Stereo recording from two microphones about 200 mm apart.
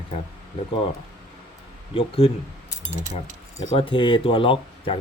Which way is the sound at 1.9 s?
25° left (ahead or behind).